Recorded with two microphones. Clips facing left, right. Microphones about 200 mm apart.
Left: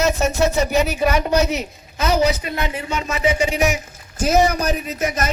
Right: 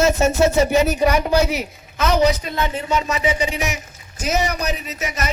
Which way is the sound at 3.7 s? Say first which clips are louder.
Left 5 dB; 50° left (ahead or behind).